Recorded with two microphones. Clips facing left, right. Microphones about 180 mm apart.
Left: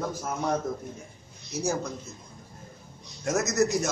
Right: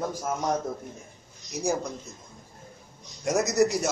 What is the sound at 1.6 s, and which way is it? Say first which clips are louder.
Speech: right 1 dB; 15° right (ahead or behind).